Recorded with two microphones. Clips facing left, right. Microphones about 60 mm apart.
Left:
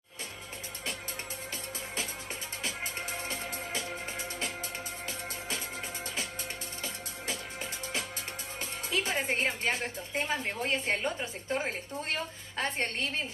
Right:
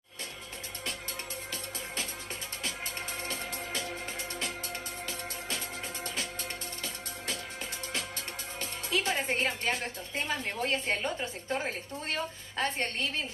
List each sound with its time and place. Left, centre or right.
8.5 s a woman's voice: left
11.1 s a woman's voice: centre
12.5 s a woman's voice: left